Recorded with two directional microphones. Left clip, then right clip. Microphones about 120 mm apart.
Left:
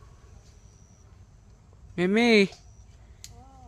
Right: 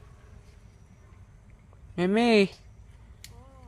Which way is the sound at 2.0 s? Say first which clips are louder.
Left 1 dB; 30° left (ahead or behind).